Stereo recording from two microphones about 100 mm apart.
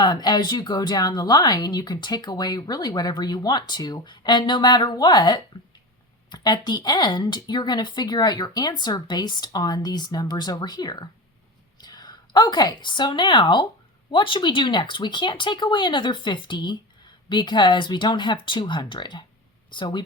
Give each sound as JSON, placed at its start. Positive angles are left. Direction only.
{"t": 0.0, "sound": "a woman's voice", "side_deg": 45}